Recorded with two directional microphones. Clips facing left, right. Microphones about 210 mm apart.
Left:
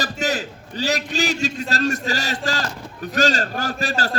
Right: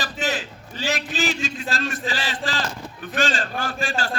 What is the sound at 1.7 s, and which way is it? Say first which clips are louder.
A man's voice: left 5 dB; 40° left (ahead or behind).